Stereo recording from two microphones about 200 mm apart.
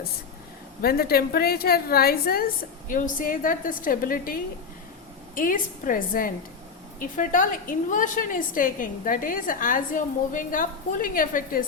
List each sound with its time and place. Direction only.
0.8 s a woman's voice: 50° left (ahead or behind)